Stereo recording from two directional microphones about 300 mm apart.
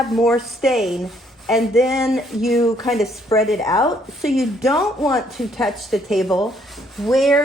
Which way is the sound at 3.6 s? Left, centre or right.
Centre.